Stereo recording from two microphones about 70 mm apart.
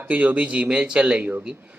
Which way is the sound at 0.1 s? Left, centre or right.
Right.